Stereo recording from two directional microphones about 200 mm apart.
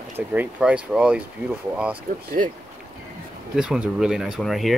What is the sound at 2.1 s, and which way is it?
Speech, 45° right (ahead or behind).